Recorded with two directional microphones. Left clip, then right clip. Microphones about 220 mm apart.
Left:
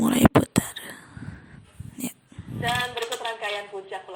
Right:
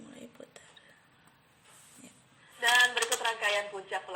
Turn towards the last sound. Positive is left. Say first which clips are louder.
# even
turn(degrees=-45)  # may be behind; listen again after turning